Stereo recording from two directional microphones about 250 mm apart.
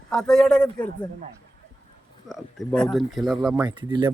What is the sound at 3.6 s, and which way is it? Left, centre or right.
Speech, centre.